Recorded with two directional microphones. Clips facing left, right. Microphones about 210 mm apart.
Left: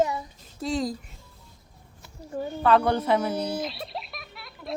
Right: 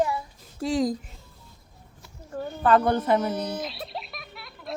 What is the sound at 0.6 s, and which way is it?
Speech, 10° right (ahead or behind).